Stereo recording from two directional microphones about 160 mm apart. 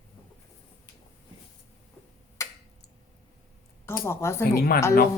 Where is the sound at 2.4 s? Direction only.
15° left (ahead or behind).